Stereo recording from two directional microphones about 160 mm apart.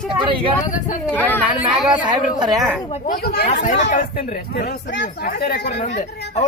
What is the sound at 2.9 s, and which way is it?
Speech, 65° left (ahead or behind).